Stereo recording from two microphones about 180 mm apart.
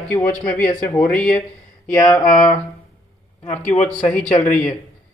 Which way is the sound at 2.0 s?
25° left (ahead or behind).